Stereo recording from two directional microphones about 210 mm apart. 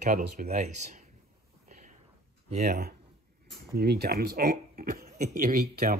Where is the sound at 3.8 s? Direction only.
50° right (ahead or behind).